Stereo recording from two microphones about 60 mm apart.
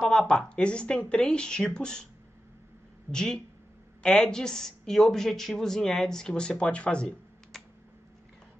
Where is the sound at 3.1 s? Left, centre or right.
Centre.